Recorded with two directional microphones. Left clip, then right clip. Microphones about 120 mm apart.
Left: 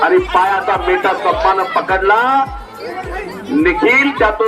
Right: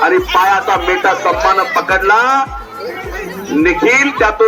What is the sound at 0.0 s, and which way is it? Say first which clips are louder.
A man's voice: right 1 dB; 40° left (ahead or behind).